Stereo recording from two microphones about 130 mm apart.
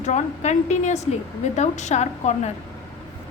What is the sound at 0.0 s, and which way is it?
A woman's voice, 65° left (ahead or behind).